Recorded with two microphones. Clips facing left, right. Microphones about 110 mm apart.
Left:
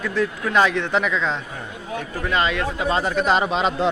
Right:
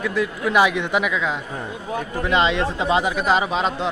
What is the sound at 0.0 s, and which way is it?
A man's voice, 10° right (ahead or behind).